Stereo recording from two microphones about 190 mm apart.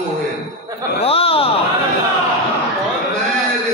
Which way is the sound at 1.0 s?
30° left (ahead or behind).